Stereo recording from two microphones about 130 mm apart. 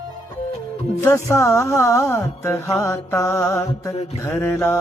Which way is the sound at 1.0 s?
20° left (ahead or behind).